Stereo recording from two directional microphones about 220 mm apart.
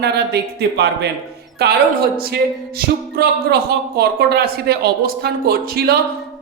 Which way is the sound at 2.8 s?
45° right (ahead or behind).